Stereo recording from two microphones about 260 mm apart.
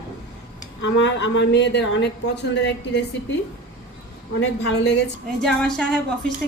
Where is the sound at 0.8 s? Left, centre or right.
Left.